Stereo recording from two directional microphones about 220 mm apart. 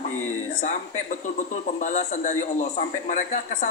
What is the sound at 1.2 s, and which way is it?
A man's voice, 35° left (ahead or behind).